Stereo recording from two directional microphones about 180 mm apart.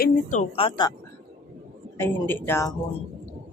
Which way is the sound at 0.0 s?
45° left (ahead or behind).